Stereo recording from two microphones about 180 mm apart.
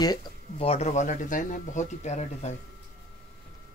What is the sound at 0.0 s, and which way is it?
Speech, 20° left (ahead or behind).